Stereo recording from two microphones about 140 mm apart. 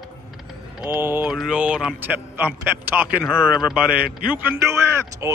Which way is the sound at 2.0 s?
15° right (ahead or behind).